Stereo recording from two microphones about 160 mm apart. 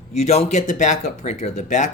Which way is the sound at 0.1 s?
45° left (ahead or behind).